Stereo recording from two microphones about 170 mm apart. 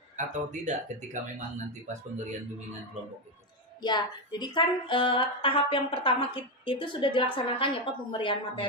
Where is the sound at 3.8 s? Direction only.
25° left (ahead or behind).